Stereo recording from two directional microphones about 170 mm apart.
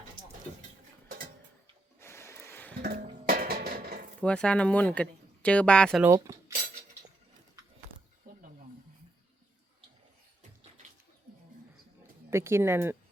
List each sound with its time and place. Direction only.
2.0 s a sound: 15° left (ahead or behind)
3.2 s music: 65° right (ahead or behind)
4.2 s speech: 5° left (ahead or behind)
6.1 s cutlery: 20° right (ahead or behind)
12.3 s speech: 15° right (ahead or behind)